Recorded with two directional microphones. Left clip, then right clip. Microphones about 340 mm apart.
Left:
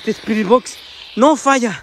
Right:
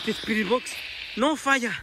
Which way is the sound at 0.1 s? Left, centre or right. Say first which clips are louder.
Left 11 dB; centre.